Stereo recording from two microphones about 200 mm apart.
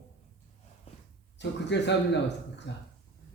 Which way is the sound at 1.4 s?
60° left (ahead or behind).